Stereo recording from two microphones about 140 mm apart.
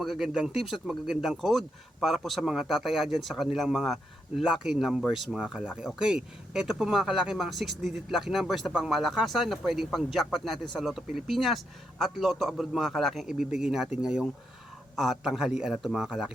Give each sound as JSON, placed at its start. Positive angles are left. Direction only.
{"t": 0.0, "sound": "speech", "side_deg": 0}